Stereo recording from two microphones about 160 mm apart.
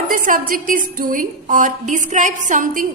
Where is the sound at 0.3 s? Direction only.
60° right (ahead or behind).